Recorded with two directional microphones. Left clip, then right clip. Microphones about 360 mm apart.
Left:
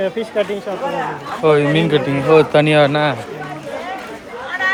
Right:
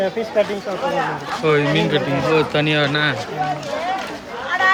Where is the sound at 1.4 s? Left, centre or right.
Centre.